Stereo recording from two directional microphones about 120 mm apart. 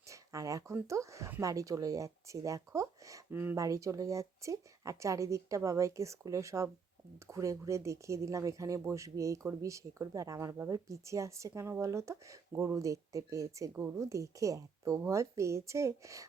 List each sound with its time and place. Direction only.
0.1 s speech: 25° right (ahead or behind)